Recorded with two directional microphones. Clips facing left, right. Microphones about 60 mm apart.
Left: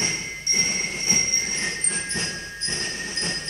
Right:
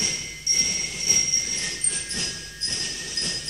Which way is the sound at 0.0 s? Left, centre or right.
Left.